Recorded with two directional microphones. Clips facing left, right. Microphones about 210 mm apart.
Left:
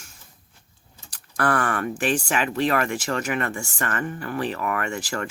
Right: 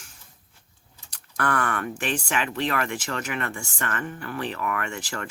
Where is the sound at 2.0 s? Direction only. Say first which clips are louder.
Left 5 dB; 40° left (ahead or behind).